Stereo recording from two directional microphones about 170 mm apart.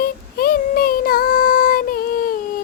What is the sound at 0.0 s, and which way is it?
Child singing, 60° left (ahead or behind).